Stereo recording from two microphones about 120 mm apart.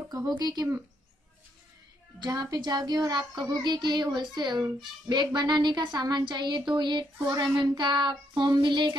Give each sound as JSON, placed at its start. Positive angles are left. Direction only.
{"t": 0.3, "sound": "speech", "side_deg": -35}
{"t": 2.1, "sound": "a woman's voice", "side_deg": -35}